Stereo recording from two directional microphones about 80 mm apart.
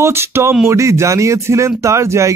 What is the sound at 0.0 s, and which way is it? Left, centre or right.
Speech, right.